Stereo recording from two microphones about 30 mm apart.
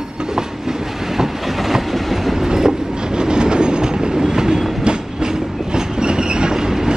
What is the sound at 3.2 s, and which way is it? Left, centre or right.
Train, right.